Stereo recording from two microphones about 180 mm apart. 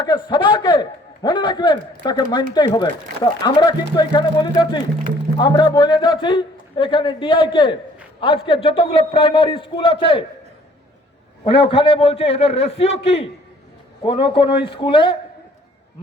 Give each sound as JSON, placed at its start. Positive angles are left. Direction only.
{"t": 0.0, "sound": "a man's voice", "side_deg": 25}
{"t": 11.4, "sound": "a man's voice", "side_deg": 30}